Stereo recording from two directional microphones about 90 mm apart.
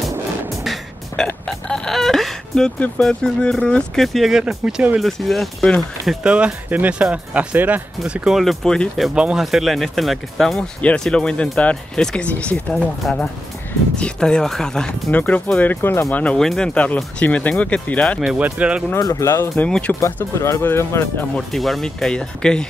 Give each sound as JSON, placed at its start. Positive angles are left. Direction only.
{"t": 0.5, "sound": "music", "side_deg": 0}
{"t": 1.2, "sound": "speech", "side_deg": 5}
{"t": 6.2, "sound": "speech", "side_deg": -15}
{"t": 8.0, "sound": "speech", "side_deg": -10}
{"t": 8.4, "sound": "speech", "side_deg": 5}
{"t": 10.8, "sound": "speech", "side_deg": 10}
{"t": 13.9, "sound": "speech", "side_deg": 10}
{"t": 15.0, "sound": "speech", "side_deg": 15}
{"t": 16.2, "sound": "speech", "side_deg": 15}
{"t": 18.2, "sound": "speech", "side_deg": -15}
{"t": 18.9, "sound": "speech", "side_deg": 40}
{"t": 19.6, "sound": "speech", "side_deg": 15}
{"t": 20.3, "sound": "speech", "side_deg": 35}
{"t": 21.4, "sound": "speech", "side_deg": 0}